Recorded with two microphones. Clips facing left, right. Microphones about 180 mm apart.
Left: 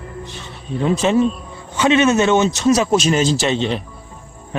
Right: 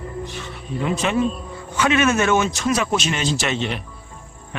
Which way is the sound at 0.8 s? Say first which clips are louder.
Left 5 dB; 30° left (ahead or behind).